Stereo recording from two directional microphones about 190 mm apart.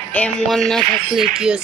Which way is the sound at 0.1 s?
5° left (ahead or behind).